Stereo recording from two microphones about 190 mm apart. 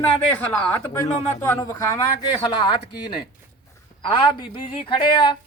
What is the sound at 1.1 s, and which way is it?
Speech, 35° left (ahead or behind).